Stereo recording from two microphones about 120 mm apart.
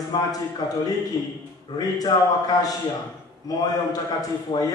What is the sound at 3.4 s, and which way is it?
A man's voice, 30° left (ahead or behind).